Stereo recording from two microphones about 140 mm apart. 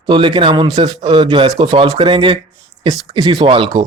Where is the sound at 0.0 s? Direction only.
35° right (ahead or behind).